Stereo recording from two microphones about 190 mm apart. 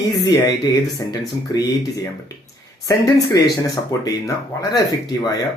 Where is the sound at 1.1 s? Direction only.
20° left (ahead or behind).